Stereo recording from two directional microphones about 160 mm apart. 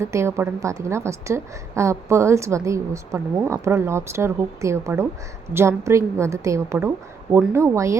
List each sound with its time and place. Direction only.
0.0 s a woman's voice: 15° right (ahead or behind)